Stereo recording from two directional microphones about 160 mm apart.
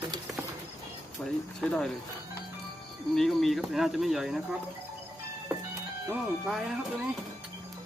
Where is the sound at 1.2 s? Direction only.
5° left (ahead or behind).